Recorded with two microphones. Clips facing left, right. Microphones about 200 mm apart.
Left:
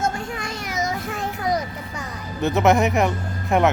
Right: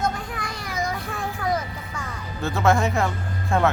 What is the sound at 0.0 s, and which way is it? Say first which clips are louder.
Children playing: left 2 dB; 25° left (ahead or behind).